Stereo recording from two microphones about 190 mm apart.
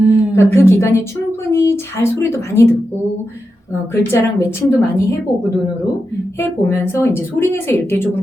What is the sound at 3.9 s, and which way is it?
Speech, 15° left (ahead or behind).